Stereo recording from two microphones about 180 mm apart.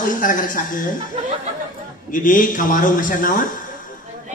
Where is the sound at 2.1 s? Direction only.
50° left (ahead or behind).